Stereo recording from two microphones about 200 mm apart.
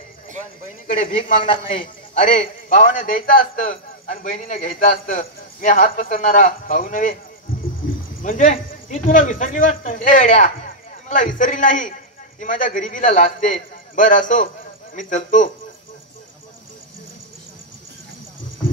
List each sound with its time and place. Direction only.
0.8 s a man's voice: 40° left (ahead or behind)
8.2 s speech: 40° left (ahead or behind)